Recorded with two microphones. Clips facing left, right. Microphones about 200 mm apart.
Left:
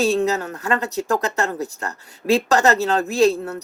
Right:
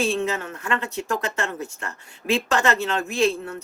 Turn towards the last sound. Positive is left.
turn(degrees=40)  # may be behind; listen again after turning